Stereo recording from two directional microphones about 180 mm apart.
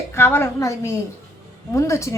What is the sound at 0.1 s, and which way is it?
A woman's voice, 10° left (ahead or behind).